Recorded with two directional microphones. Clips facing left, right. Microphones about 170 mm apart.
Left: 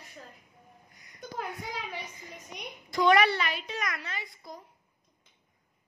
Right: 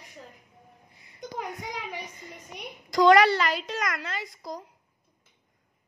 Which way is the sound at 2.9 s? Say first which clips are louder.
Right 5 dB; 90° right.